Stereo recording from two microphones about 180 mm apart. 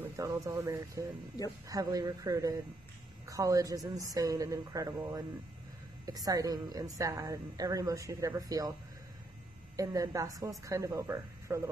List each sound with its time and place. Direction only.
0.1 s speech: 20° right (ahead or behind)
1.4 s speech: 20° left (ahead or behind)
1.7 s a woman's voice: 20° right (ahead or behind)
9.8 s a woman's voice: 20° right (ahead or behind)